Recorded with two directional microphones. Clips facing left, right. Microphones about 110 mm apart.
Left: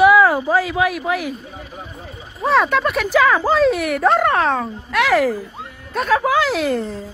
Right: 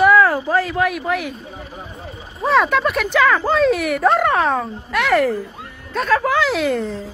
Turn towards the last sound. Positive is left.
turn(degrees=0)  # may be behind; listen again after turning